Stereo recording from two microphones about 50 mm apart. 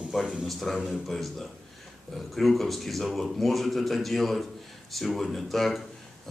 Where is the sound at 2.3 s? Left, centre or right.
Centre.